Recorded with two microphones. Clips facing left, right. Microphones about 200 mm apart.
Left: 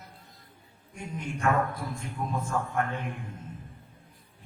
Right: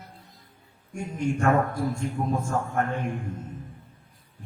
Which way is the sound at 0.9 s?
50° right (ahead or behind).